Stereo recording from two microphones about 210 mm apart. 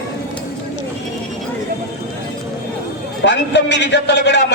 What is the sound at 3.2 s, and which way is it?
A man's voice, 55° left (ahead or behind).